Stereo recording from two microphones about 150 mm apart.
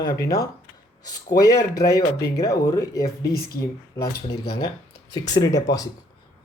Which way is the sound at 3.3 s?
90° left.